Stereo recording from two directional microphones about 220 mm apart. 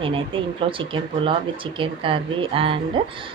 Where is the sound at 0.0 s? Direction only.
25° right (ahead or behind).